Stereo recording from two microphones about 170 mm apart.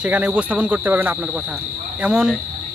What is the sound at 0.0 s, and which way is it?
Speech, 5° right (ahead or behind).